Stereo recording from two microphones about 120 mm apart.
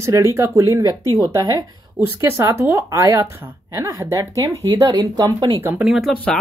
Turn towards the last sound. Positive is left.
turn(degrees=10)  # may be behind; listen again after turning